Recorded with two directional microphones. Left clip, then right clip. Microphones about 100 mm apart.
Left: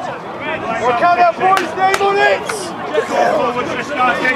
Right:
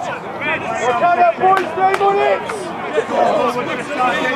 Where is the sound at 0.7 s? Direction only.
70° left (ahead or behind).